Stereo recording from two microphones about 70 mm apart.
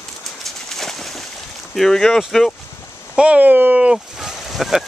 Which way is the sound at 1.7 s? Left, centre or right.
Centre.